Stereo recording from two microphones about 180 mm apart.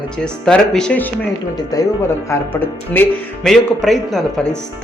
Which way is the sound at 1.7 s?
20° left (ahead or behind).